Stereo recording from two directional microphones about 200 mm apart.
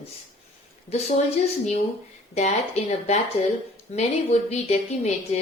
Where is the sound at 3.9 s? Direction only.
35° left (ahead or behind).